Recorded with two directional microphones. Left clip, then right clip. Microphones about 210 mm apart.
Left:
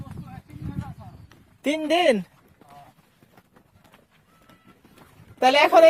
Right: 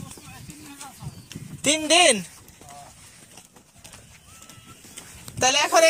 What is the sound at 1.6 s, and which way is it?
Speech, 20° left (ahead or behind).